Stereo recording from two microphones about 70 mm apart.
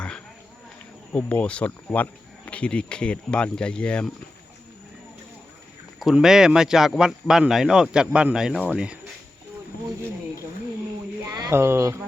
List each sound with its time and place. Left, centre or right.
1.1 s speech: centre
6.1 s speech: centre
11.3 s speech: right
11.5 s speech: right